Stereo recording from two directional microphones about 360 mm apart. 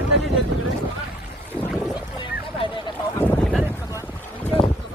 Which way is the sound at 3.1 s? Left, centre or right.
Centre.